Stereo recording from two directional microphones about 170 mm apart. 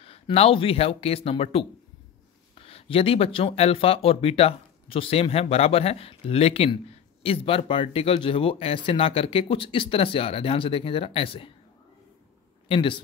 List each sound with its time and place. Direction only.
0.0 s speech: 35° left (ahead or behind)
12.6 s speech: 30° left (ahead or behind)